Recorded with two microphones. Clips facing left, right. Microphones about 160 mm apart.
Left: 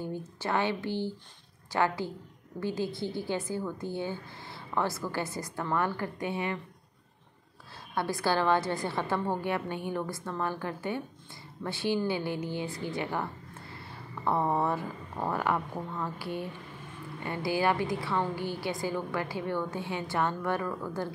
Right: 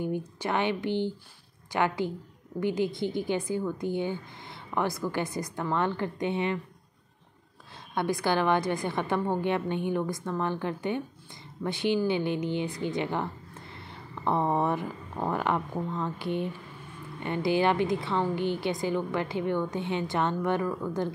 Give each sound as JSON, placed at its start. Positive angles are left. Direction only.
{"t": 0.0, "sound": "a woman's voice", "side_deg": -15}
{"t": 7.9, "sound": "a woman's voice", "side_deg": -20}